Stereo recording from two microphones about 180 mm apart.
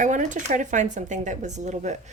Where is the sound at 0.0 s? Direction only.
45° right (ahead or behind).